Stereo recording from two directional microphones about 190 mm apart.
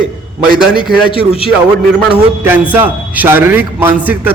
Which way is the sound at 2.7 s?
10° right (ahead or behind).